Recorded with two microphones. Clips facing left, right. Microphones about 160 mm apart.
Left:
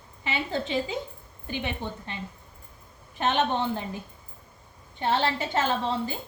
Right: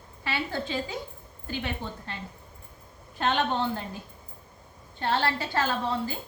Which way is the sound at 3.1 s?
20° left (ahead or behind).